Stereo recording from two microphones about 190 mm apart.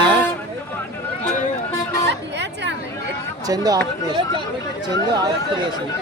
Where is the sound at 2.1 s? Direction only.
65° right (ahead or behind).